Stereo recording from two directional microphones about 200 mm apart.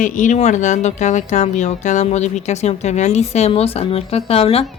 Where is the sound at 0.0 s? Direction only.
40° left (ahead or behind).